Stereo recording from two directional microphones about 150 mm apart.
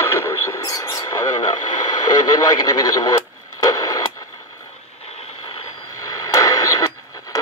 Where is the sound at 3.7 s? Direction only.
25° left (ahead or behind).